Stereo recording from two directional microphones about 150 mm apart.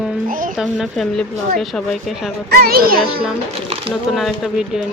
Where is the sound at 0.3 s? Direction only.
65° right (ahead or behind).